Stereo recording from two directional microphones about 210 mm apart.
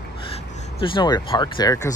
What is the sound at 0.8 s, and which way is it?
Speech, 25° left (ahead or behind).